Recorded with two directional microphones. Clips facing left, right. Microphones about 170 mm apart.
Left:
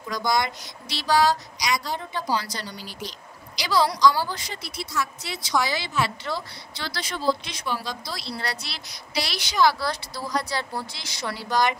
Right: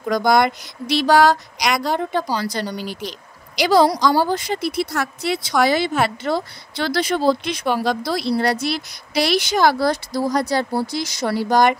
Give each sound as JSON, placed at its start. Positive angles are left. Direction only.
{"t": 0.0, "sound": "a sound", "side_deg": -55}
{"t": 2.3, "sound": "speech", "side_deg": -50}
{"t": 2.7, "sound": "speech", "side_deg": -65}